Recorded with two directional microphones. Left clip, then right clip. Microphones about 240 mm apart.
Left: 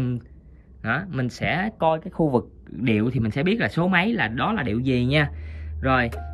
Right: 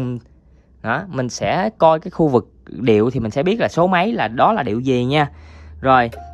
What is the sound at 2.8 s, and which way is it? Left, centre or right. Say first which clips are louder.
Speech: right 9 dB; centre.